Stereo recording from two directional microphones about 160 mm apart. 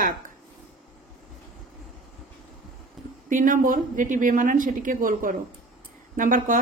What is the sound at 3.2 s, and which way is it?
Speech, 55° right (ahead or behind).